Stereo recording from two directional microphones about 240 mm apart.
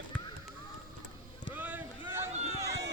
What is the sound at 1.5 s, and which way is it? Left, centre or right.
Boat, centre.